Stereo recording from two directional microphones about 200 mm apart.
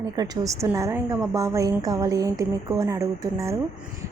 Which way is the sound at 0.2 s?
15° right (ahead or behind).